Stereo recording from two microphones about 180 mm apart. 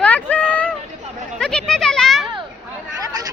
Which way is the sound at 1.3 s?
5° left (ahead or behind).